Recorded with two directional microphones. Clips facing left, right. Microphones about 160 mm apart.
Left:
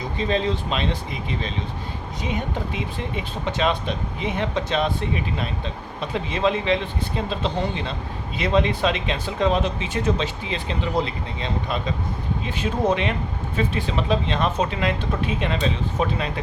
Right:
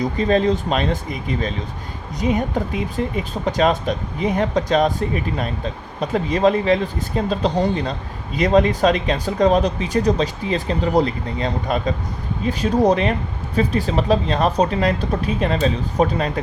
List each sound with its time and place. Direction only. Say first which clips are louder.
0.0 s speech: right 6 dB; 45° right (ahead or behind)